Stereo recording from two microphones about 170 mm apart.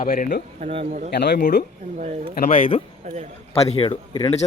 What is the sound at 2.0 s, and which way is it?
Speech, 40° right (ahead or behind).